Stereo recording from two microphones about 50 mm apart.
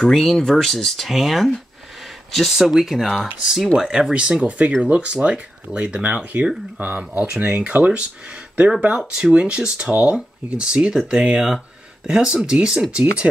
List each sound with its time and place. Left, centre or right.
0.0 s speech: centre